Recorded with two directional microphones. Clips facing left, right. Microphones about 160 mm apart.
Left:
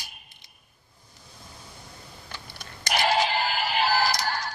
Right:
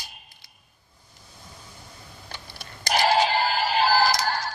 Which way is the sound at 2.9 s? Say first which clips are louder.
Right 3 dB; 35° right (ahead or behind).